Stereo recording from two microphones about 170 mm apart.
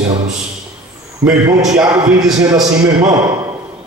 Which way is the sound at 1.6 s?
5° right (ahead or behind).